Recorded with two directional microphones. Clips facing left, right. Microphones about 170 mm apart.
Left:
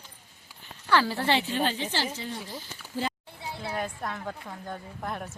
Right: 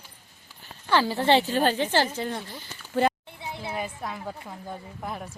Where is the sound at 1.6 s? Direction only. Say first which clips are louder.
Right 6 dB; 50° right (ahead or behind).